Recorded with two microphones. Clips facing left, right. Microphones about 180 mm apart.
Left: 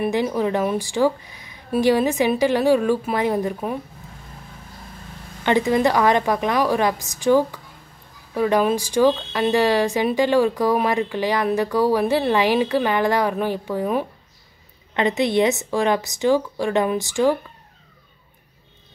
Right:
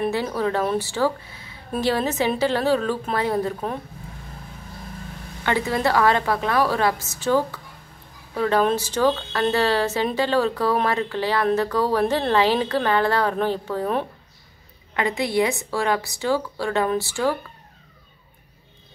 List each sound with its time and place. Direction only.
0.0 s speech: 15° left (ahead or behind)
5.4 s speech: 20° left (ahead or behind)